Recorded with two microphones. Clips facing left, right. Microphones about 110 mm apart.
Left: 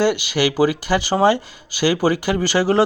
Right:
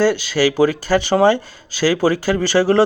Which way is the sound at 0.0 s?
15° left (ahead or behind).